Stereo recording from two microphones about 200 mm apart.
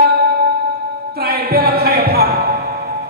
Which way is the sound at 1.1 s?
50° right (ahead or behind).